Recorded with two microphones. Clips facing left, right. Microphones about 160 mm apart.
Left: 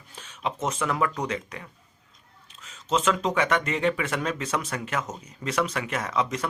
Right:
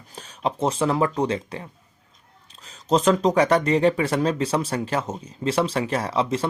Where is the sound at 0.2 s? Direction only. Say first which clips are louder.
Right 6 dB; 35° right (ahead or behind).